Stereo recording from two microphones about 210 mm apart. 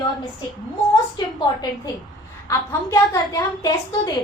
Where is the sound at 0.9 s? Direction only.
20° left (ahead or behind).